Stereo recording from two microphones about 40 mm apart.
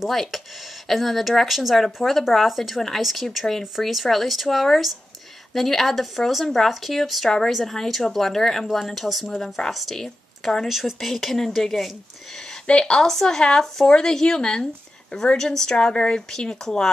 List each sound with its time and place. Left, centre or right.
0.1 s speech: centre
7.2 s speech: centre
9.4 s speech: centre
10.7 s speech: centre
12.6 s speech: left
13.0 s speech: centre
16.3 s speech: centre